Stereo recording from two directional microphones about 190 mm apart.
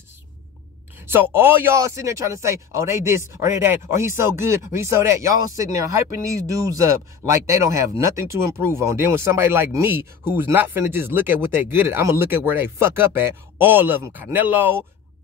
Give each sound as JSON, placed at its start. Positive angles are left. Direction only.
{"t": 1.0, "sound": "speech", "side_deg": -10}